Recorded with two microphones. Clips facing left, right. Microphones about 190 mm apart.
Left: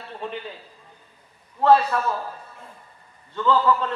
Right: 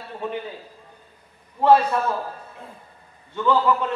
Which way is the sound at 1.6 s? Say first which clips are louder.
Right 1 dB; 15° right (ahead or behind).